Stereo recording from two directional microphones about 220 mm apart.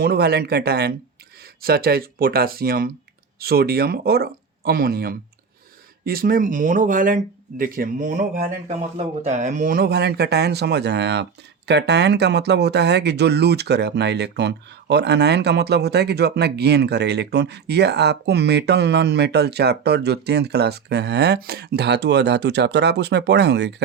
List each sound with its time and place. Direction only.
0.0 s speech: 45° right (ahead or behind)